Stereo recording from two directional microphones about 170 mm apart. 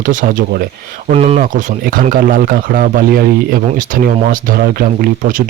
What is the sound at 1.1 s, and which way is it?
Speech, 40° right (ahead or behind).